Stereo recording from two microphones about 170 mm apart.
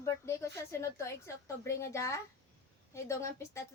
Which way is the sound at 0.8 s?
15° left (ahead or behind).